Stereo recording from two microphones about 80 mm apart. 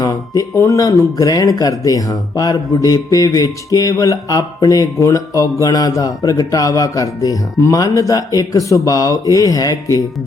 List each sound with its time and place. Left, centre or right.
0.0 s music: left